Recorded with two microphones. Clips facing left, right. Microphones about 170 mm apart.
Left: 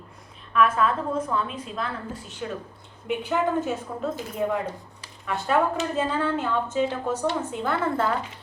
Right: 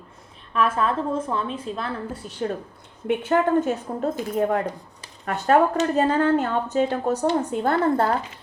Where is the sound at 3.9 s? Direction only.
40° right (ahead or behind).